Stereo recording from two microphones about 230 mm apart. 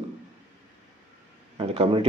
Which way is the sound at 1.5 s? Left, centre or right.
Right.